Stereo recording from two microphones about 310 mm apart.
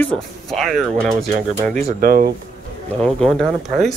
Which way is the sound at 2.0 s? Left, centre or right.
Right.